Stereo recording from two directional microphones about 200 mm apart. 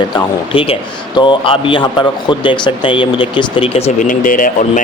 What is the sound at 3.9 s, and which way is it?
Speech, 40° left (ahead or behind).